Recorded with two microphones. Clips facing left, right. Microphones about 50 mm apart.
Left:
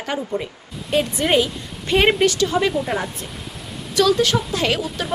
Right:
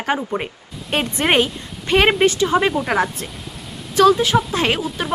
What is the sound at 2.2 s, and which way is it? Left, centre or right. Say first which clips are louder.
Speech: right 2 dB; right.